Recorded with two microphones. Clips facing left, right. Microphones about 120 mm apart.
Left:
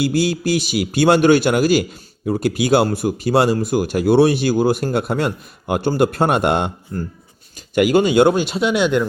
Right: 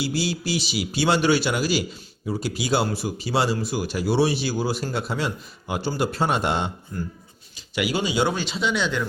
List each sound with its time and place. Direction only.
0.0 s a man's voice: 50° left (ahead or behind)